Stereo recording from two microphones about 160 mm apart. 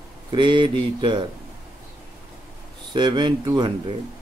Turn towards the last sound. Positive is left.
turn(degrees=-30)  # may be behind; listen again after turning